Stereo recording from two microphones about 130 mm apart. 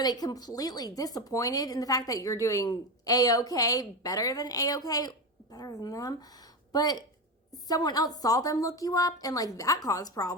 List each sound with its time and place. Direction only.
0.0 s speech: 30° left (ahead or behind)